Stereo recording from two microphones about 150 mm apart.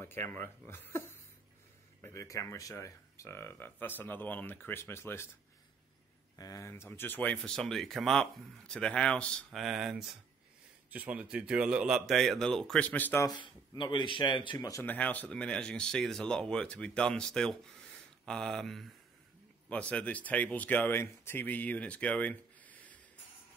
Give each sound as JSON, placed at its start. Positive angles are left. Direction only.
{"t": 0.0, "sound": "speech", "side_deg": 15}
{"t": 6.3, "sound": "speech", "side_deg": 25}
{"t": 13.3, "sound": "speech", "side_deg": 30}
{"t": 14.7, "sound": "speech", "side_deg": 15}